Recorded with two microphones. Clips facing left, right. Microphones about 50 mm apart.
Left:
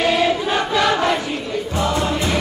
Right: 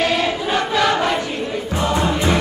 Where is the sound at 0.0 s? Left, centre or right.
Centre.